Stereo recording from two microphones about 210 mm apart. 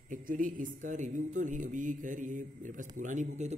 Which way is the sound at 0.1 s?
40° right (ahead or behind).